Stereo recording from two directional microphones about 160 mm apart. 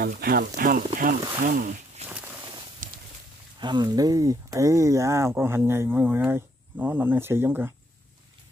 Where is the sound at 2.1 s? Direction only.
5° right (ahead or behind).